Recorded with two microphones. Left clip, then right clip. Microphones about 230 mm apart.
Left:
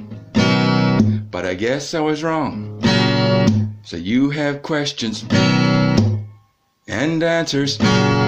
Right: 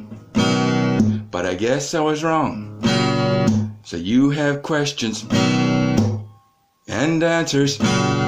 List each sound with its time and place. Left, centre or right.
0.3 s music: left
1.3 s speech: left
2.9 s guitar: left
6.9 s music: left